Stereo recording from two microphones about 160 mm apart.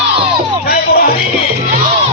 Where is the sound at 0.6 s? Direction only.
80° left.